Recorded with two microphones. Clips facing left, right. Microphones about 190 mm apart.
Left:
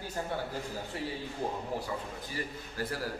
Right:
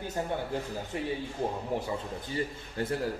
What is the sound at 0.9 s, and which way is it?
Speech, 20° right (ahead or behind).